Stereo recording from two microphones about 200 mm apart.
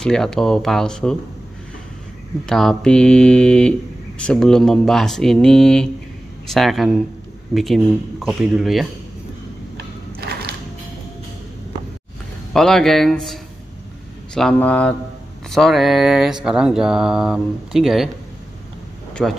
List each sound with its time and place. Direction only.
0.0 s speech: 5° left (ahead or behind)
2.4 s speech: centre (ahead or behind)
12.5 s speech: centre (ahead or behind)
19.2 s speech: centre (ahead or behind)